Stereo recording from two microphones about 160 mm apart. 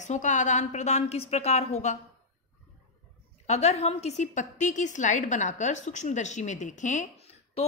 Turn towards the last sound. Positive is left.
turn(degrees=45)  # may be behind; listen again after turning